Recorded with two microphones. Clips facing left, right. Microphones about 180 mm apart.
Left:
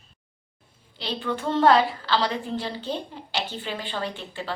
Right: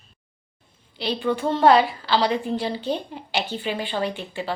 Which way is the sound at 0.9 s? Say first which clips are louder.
Right 5 dB; 15° right (ahead or behind).